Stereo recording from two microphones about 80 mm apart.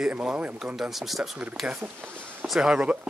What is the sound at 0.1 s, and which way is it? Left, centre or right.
Speech, centre.